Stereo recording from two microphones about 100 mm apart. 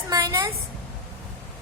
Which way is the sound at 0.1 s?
35° right (ahead or behind).